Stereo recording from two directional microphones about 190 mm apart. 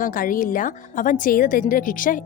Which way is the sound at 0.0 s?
45° left (ahead or behind).